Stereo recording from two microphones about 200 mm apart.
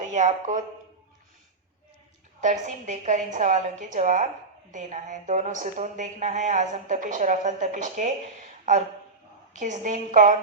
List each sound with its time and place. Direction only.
0.0 s speech: 35° right (ahead or behind)
2.4 s speech: 40° right (ahead or behind)
9.5 s speech: 40° right (ahead or behind)